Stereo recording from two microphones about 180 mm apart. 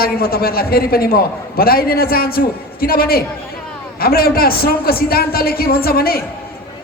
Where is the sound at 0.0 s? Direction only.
55° left (ahead or behind).